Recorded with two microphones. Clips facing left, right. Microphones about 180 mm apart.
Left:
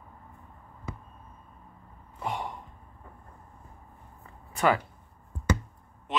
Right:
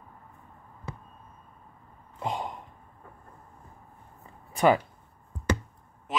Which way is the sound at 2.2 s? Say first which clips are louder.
Right 1 dB; 20° right (ahead or behind).